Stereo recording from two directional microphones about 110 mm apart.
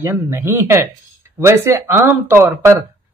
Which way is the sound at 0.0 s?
25° right (ahead or behind).